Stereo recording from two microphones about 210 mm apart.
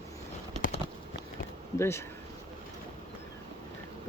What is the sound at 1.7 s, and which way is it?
Speech, 10° left (ahead or behind).